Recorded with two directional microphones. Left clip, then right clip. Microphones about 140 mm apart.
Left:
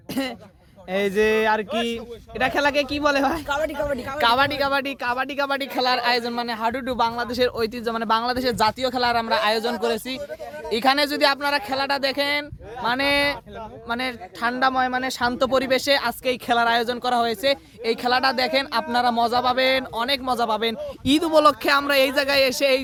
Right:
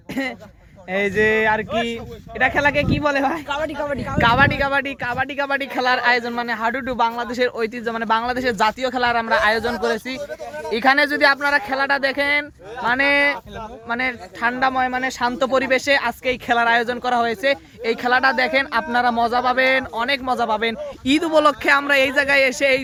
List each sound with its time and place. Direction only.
0.1 s speech: 30° left (ahead or behind)
4.2 s speech: 20° left (ahead or behind)
5.5 s speech: 20° left (ahead or behind)